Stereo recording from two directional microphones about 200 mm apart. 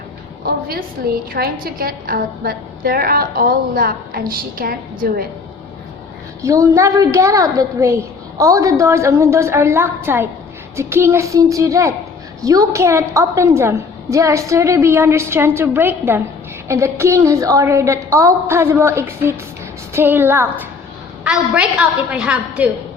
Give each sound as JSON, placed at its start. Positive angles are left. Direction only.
{"t": 0.4, "sound": "a woman's voice", "side_deg": -50}
{"t": 6.4, "sound": "a woman's voice", "side_deg": -15}